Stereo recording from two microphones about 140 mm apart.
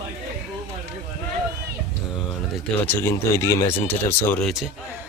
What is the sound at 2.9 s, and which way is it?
Speech, 20° left (ahead or behind).